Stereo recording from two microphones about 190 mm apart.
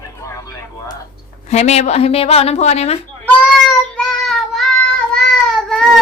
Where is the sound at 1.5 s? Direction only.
35° left (ahead or behind).